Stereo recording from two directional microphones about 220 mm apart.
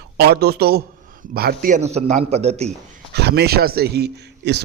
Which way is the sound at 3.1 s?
50° right (ahead or behind).